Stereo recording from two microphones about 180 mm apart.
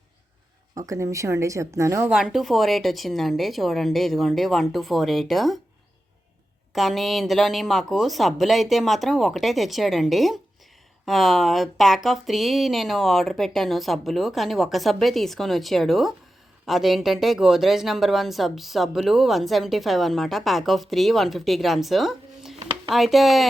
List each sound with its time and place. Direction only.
0.8 s a woman's voice: 15° right (ahead or behind)
2.0 s speech: 5° right (ahead or behind)
6.7 s speech: centre (ahead or behind)